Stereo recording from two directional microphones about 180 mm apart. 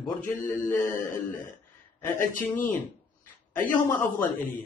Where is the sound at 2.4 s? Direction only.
10° left (ahead or behind).